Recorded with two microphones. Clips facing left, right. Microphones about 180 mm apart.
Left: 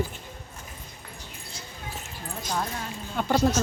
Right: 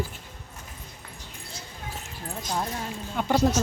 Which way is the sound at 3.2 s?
15° right (ahead or behind).